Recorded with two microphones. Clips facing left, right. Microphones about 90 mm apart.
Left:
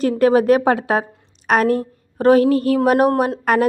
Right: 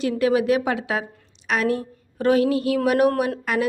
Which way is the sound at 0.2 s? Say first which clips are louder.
Left 6 dB; 45° left (ahead or behind).